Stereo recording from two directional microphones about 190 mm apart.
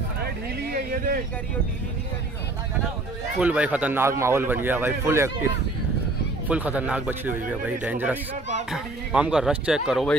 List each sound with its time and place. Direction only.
0.2 s a sound: 55° right (ahead or behind)
3.3 s a man's voice: 5° right (ahead or behind)
6.5 s a man's voice: 5° right (ahead or behind)